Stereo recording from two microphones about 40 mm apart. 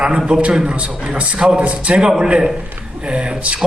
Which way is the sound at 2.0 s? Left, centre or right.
Centre.